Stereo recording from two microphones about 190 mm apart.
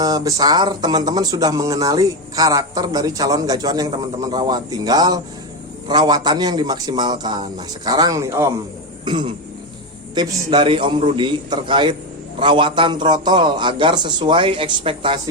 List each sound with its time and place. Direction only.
0.0 s speech: 20° right (ahead or behind)